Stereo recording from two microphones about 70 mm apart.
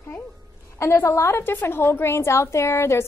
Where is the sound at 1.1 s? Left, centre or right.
Left.